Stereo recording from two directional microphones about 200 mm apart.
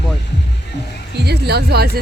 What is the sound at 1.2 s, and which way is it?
Speech, 55° right (ahead or behind).